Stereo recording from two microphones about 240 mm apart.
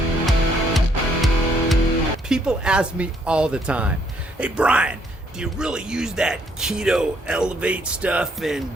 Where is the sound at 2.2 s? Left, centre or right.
Centre.